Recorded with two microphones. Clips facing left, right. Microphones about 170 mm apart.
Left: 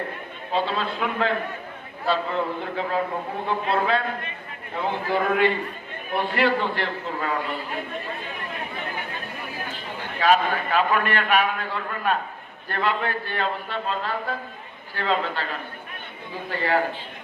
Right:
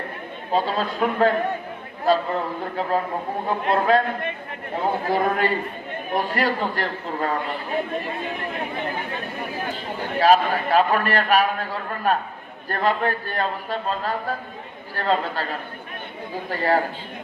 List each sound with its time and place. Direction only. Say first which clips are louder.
0.5 s a man's voice: right 2 dB; 40° right (ahead or behind)
10.2 s a man's voice: right 3 dB; 35° right (ahead or behind)
16.5 s a man's voice: right 2 dB; 40° right (ahead or behind)